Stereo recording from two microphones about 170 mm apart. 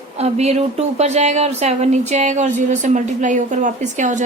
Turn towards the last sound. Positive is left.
turn(degrees=-45)  # may be behind; listen again after turning